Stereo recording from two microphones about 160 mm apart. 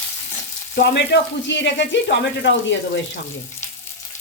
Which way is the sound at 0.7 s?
90° left.